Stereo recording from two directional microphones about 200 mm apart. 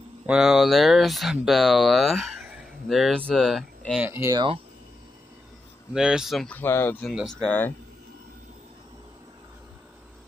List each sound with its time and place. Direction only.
0.3 s speech: centre (ahead or behind)
4.1 s speech: 15° right (ahead or behind)
5.9 s speech: 5° right (ahead or behind)